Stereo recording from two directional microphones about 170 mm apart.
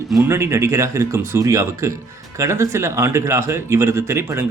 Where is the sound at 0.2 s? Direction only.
15° right (ahead or behind).